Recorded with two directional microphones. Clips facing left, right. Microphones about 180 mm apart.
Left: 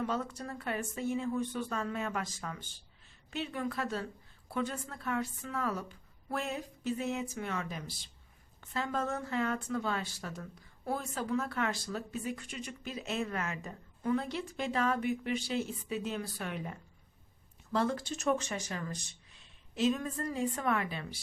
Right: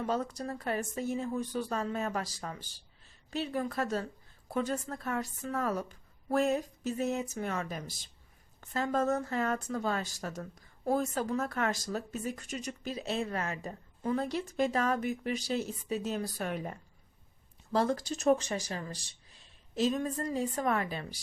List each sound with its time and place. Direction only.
0.0 s speech: 40° right (ahead or behind)